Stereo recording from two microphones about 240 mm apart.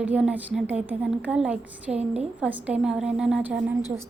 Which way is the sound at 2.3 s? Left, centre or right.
Centre.